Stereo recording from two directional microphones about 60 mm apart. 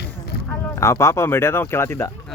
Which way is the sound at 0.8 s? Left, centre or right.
Left.